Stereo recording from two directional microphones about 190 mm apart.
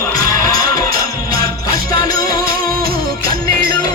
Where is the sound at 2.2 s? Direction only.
50° right (ahead or behind).